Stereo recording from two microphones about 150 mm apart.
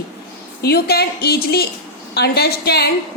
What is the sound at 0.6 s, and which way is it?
A woman's voice, 90° left.